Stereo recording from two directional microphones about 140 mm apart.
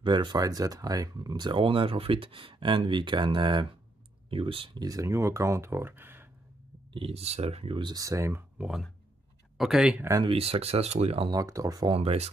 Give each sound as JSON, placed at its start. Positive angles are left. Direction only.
{"t": 0.0, "sound": "speech", "side_deg": -35}
{"t": 4.8, "sound": "speech", "side_deg": -25}
{"t": 6.9, "sound": "speech", "side_deg": -45}
{"t": 8.5, "sound": "speech", "side_deg": 0}
{"t": 10.2, "sound": "speech", "side_deg": -45}
{"t": 11.2, "sound": "speech", "side_deg": -25}
{"t": 11.9, "sound": "speech", "side_deg": -45}